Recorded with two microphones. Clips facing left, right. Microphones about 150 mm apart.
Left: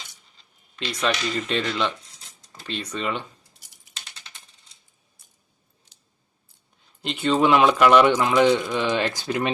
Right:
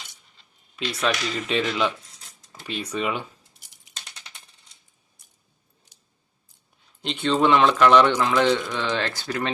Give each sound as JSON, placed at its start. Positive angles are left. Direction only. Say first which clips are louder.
{"t": 0.9, "sound": "speech", "louder": "even", "side_deg": 0}
{"t": 7.0, "sound": "speech", "louder": "left 1 dB", "side_deg": 5}